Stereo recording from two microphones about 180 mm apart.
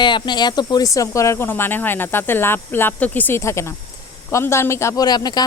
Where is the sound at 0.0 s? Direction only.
25° left (ahead or behind).